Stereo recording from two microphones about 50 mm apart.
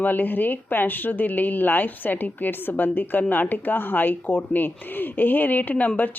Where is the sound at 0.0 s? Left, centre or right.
Left.